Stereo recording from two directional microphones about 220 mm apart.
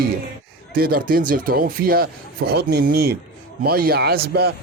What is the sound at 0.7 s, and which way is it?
Speech, 40° right (ahead or behind).